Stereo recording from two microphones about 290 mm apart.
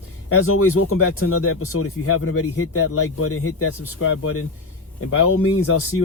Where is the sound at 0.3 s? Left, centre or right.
Left.